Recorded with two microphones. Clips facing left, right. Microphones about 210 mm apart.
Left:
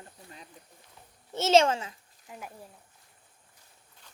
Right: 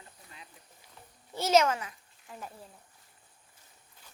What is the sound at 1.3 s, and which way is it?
A child's voice, 25° left (ahead or behind).